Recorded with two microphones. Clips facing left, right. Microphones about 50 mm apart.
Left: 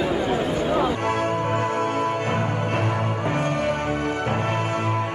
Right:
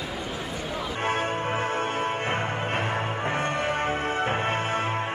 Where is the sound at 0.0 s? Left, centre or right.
Left.